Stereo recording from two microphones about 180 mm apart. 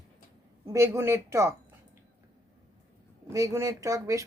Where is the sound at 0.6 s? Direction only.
15° right (ahead or behind).